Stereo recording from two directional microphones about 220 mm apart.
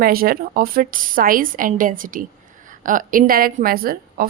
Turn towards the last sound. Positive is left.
turn(degrees=-40)  # may be behind; listen again after turning